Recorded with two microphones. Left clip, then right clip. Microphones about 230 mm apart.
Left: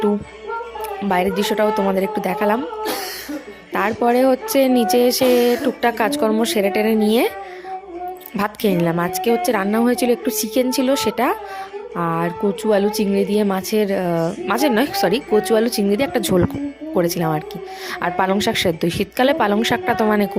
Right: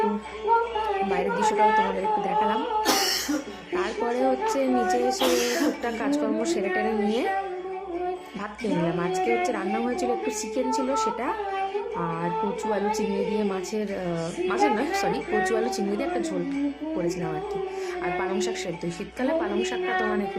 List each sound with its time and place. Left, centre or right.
1.1 s a woman's voice: left
3.8 s a woman's voice: left
8.4 s a woman's voice: left